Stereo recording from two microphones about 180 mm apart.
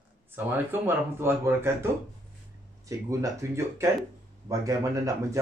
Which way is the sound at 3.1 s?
15° right (ahead or behind).